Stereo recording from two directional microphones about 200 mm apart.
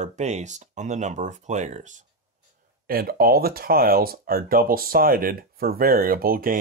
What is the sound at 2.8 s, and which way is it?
Speech, 50° right (ahead or behind).